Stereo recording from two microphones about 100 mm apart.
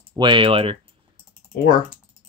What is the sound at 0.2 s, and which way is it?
Speech, 55° right (ahead or behind).